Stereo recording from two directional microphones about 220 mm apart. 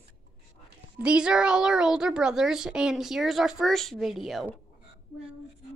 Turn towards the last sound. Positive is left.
turn(degrees=0)  # may be behind; listen again after turning